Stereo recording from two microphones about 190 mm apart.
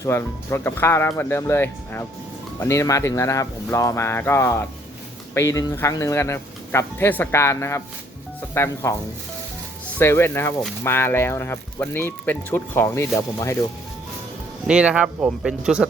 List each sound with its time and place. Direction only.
0.0 s speech: 15° left (ahead or behind)
10.0 s speech: 15° left (ahead or behind)
14.7 s speech: 5° right (ahead or behind)